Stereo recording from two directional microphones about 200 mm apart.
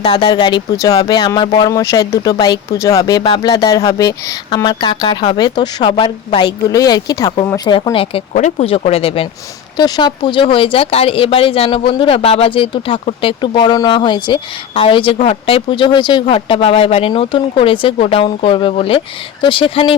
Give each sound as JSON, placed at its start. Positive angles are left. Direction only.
{"t": 0.0, "sound": "speech", "side_deg": 25}
{"t": 8.3, "sound": "speech", "side_deg": 35}